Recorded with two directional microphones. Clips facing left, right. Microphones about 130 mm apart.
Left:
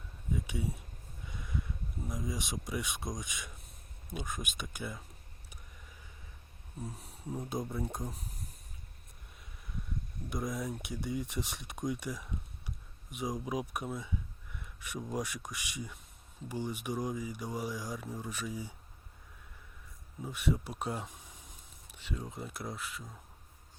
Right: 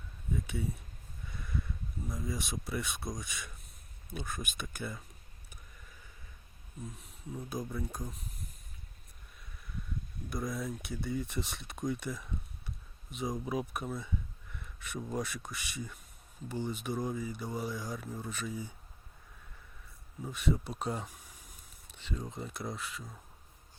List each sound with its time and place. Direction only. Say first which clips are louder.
0.3 s speech: right 1 dB; 15° left (ahead or behind)
6.8 s speech: left 3 dB; 35° left (ahead or behind)
10.2 s speech: even; 20° left (ahead or behind)
14.5 s a sound: even; 10° left (ahead or behind)
15.1 s speech: even; 15° left (ahead or behind)
20.2 s speech: right 1 dB; 10° left (ahead or behind)